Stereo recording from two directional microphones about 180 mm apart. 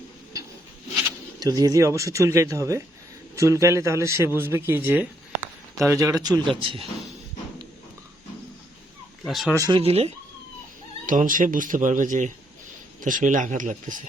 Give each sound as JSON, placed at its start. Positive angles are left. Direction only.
{"t": 1.4, "sound": "speech", "side_deg": -20}
{"t": 9.2, "sound": "speech", "side_deg": 0}
{"t": 9.6, "sound": "speech", "side_deg": -25}
{"t": 11.0, "sound": "speech", "side_deg": -45}